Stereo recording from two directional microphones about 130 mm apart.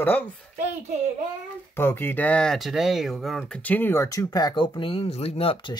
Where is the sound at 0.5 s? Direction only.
60° right (ahead or behind).